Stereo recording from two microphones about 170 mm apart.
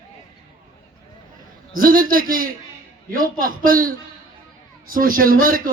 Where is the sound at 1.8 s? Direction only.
55° right (ahead or behind).